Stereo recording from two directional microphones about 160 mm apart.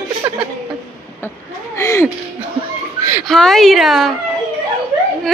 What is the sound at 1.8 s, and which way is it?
Speech, 20° left (ahead or behind).